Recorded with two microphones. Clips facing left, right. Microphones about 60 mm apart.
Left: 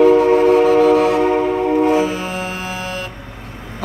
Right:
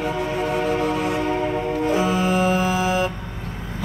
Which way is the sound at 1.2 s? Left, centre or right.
Left.